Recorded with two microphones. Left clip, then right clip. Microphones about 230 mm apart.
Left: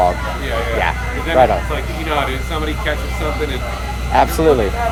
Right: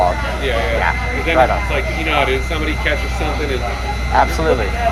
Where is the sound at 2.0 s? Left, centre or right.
Left.